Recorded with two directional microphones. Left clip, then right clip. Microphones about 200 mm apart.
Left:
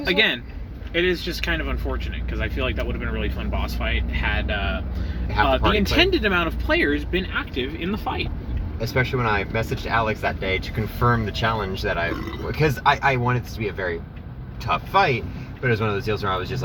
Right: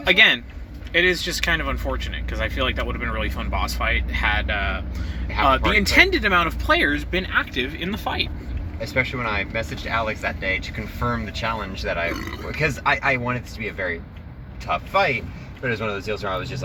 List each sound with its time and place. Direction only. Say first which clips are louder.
0.0 s speech: right 5 dB; 35° right (ahead or behind)
8.8 s speech: even; 50° left (ahead or behind)